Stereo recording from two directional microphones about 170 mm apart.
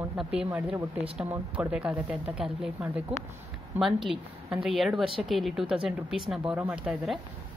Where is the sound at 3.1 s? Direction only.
40° right (ahead or behind).